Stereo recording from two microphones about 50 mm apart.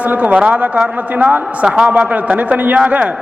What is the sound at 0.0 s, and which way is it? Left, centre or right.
Speech, right.